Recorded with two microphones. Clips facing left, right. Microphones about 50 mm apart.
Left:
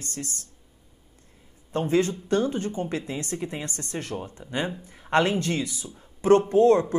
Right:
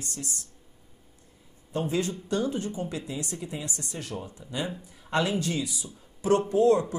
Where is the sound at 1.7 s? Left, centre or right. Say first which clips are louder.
Left 5 dB; left.